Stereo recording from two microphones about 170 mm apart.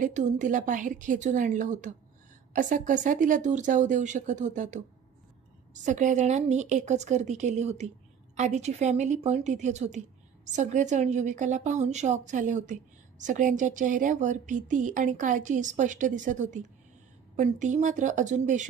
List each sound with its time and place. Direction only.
0.0 s a woman's voice: 45° right (ahead or behind)